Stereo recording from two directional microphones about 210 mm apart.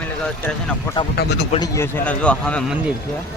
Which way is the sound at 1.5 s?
15° left (ahead or behind).